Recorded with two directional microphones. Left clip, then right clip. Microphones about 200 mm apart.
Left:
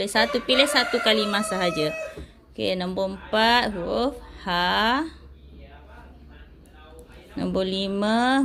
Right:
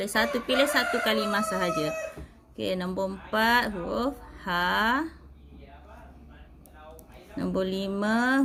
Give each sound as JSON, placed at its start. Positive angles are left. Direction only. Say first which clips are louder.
{"t": 0.0, "sound": "speech", "louder": "left 4 dB", "side_deg": 10}
{"t": 7.3, "sound": "speech", "louder": "left 4 dB", "side_deg": 15}